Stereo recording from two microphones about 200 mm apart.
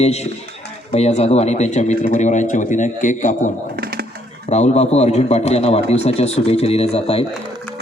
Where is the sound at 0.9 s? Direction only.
30° left (ahead or behind).